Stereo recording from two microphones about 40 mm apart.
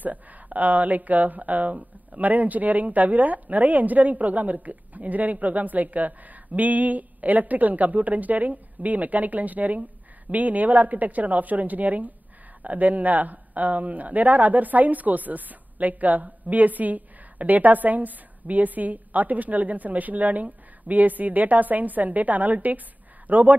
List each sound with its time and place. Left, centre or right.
0.0 s speech: right